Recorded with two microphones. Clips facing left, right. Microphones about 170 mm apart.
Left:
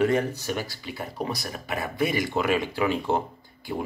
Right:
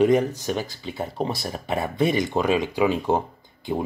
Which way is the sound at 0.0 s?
15° right (ahead or behind).